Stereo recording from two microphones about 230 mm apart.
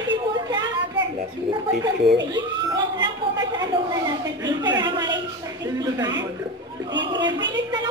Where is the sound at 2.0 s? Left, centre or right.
Right.